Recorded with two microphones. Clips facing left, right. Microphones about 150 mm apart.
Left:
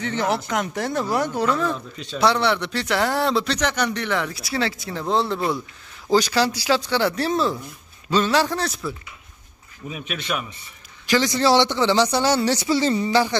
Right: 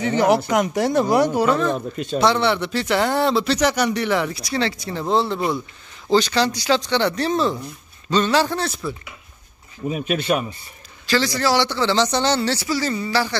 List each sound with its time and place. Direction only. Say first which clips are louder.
0.0 s speech: right 6 dB; 10° right (ahead or behind)
1.8 s speech: right 9 dB; 50° right (ahead or behind)
2.1 s speech: right 1 dB; centre (ahead or behind)
6.0 s speech: right 1 dB; 10° left (ahead or behind)
9.8 s speech: right 8 dB; 40° right (ahead or behind)
11.1 s speech: left 1 dB; 20° left (ahead or behind)
12.4 s speech: left 2 dB; 20° left (ahead or behind)